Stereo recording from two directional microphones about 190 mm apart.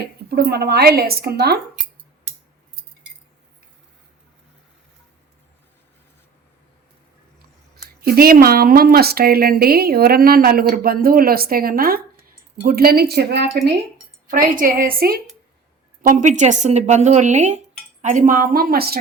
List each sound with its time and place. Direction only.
0.3 s speech: 55° right (ahead or behind)
8.0 s a woman's voice: 55° right (ahead or behind)
14.3 s a woman's voice: 45° right (ahead or behind)
16.0 s a woman's voice: 40° right (ahead or behind)